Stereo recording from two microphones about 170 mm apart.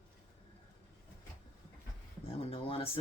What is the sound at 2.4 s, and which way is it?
Speech, 35° left (ahead or behind).